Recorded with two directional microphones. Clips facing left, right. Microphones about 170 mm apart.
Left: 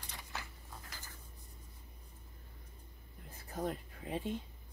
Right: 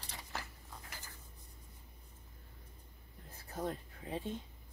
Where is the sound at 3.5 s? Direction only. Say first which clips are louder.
Left 1 dB; 15° left (ahead or behind).